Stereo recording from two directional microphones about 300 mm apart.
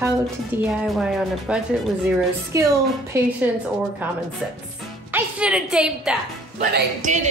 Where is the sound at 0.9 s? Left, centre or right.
Centre.